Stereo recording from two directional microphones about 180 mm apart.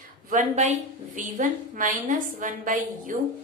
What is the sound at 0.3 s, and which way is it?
Speech, 45° right (ahead or behind).